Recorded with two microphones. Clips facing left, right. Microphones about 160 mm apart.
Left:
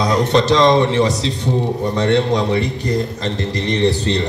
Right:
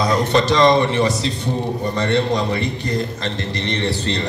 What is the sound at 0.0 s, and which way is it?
A man's voice, 5° right (ahead or behind).